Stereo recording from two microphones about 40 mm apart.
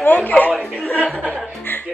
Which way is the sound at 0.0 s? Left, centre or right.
Left.